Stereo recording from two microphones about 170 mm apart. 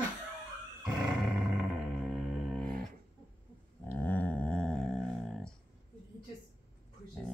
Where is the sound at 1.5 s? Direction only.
5° right (ahead or behind).